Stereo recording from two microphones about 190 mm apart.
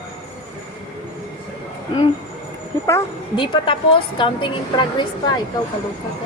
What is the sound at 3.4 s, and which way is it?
A woman's voice, 25° left (ahead or behind).